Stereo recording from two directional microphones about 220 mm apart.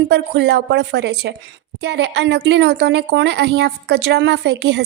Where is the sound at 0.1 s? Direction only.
50° right (ahead or behind).